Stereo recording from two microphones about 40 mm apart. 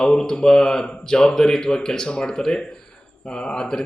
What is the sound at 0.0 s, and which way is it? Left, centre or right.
Speech, centre.